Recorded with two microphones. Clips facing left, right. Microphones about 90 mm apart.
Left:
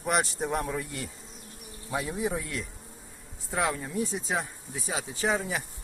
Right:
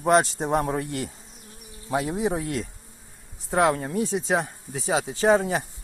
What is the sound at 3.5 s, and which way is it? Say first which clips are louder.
Speech: right 8 dB; 65° right (ahead or behind).